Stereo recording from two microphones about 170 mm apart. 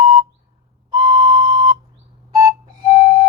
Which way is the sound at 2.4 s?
25° right (ahead or behind).